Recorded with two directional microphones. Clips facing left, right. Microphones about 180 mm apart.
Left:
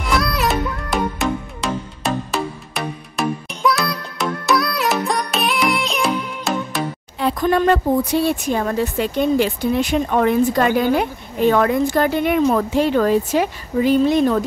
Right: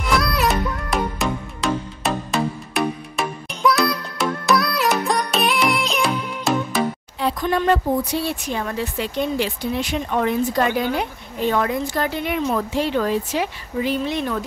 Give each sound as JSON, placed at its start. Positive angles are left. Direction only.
{"t": 0.0, "sound": "music", "side_deg": 0}
{"t": 7.2, "sound": "speech", "side_deg": 55}